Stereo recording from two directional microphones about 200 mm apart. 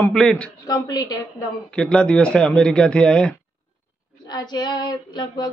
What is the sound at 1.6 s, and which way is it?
Speech, 5° left (ahead or behind).